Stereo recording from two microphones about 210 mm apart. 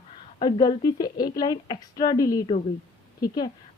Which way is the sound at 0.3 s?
20° left (ahead or behind).